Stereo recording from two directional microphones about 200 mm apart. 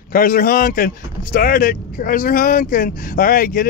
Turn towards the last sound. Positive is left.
turn(degrees=45)  # may be behind; listen again after turning